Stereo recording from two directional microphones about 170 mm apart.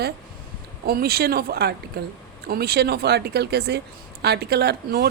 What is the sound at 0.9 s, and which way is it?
Speech, 60° right (ahead or behind).